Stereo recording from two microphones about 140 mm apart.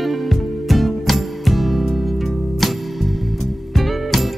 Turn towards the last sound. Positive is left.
turn(degrees=0)  # may be behind; listen again after turning